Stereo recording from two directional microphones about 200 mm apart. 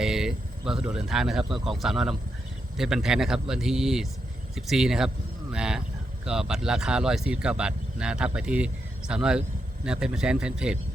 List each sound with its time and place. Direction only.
0.0 s speech: centre (ahead or behind)